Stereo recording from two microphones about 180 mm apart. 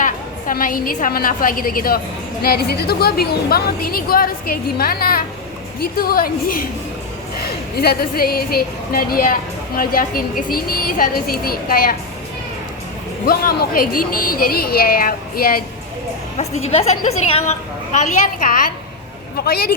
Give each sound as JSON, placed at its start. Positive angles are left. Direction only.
{"t": 0.0, "sound": "a woman's voice", "side_deg": 50}
{"t": 7.8, "sound": "a woman's voice", "side_deg": 60}
{"t": 13.2, "sound": "a woman's voice", "side_deg": 55}
{"t": 16.4, "sound": "a woman's voice", "side_deg": 35}